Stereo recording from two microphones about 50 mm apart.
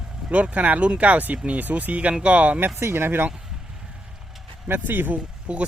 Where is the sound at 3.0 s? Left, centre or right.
Right.